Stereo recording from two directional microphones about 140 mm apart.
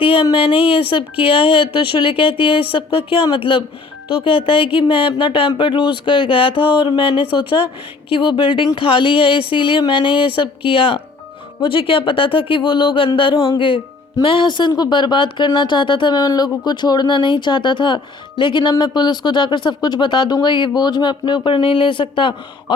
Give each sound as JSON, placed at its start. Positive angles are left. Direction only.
{"t": 0.0, "sound": "speech", "side_deg": 40}